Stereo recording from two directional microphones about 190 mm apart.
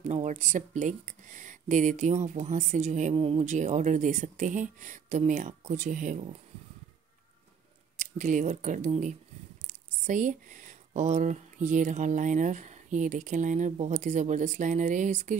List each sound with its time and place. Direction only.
0.1 s speech: 40° right (ahead or behind)
8.0 s speech: 40° right (ahead or behind)